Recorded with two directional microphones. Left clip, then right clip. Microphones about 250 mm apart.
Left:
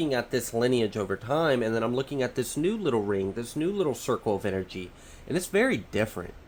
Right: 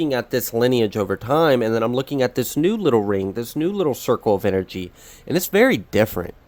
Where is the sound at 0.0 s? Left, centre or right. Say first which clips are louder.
Right 6 dB; right.